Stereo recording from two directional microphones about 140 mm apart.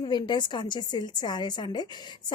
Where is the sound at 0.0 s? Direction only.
30° left (ahead or behind).